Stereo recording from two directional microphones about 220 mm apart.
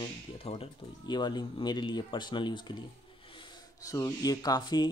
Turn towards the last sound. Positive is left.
turn(degrees=20)  # may be behind; listen again after turning